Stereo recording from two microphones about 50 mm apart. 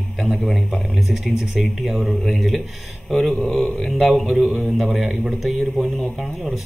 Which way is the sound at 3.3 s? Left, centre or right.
Left.